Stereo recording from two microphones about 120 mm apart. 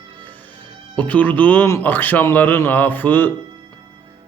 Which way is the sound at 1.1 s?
10° left (ahead or behind).